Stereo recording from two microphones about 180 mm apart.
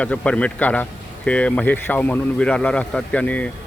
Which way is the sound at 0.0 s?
5° left (ahead or behind).